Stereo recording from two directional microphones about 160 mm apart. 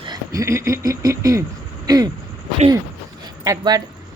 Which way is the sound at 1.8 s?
25° right (ahead or behind).